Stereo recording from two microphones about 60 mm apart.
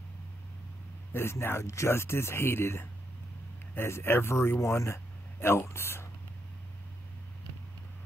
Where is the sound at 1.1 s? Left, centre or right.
Left.